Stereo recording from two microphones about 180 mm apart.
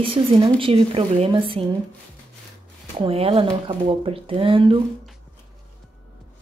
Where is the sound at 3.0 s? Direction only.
30° right (ahead or behind).